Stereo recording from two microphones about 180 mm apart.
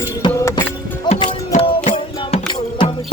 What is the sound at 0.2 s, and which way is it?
Music, 25° left (ahead or behind).